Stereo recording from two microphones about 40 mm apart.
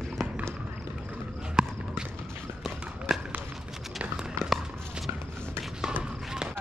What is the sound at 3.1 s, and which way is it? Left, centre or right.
Run, centre.